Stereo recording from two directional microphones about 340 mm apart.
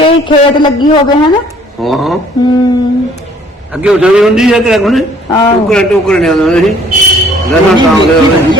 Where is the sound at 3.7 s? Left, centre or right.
Centre.